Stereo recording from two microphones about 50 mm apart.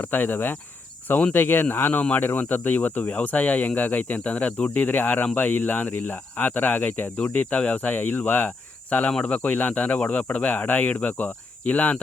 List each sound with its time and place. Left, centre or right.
0.0 s speech: left
1.9 s speech: left